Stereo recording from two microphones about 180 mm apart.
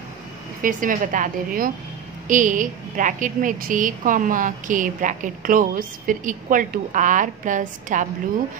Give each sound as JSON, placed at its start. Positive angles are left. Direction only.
{"t": 0.6, "sound": "a woman's voice", "side_deg": -50}